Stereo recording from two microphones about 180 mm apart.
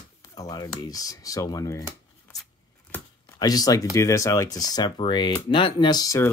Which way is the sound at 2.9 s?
15° left (ahead or behind).